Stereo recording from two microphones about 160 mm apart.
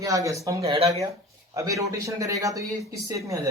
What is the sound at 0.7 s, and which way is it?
Speech, 35° right (ahead or behind).